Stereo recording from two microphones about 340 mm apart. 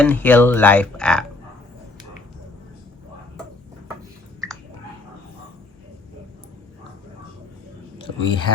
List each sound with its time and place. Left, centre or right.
0.0 s speech: centre
8.0 s speech: centre